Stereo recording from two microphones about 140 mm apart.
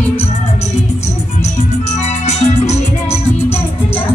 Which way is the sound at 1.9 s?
55° left (ahead or behind).